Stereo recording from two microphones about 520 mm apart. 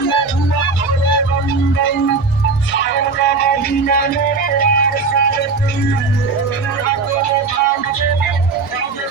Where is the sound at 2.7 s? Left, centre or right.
Centre.